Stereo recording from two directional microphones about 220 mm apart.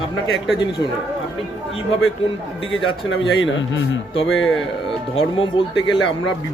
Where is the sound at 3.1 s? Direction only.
60° left (ahead or behind).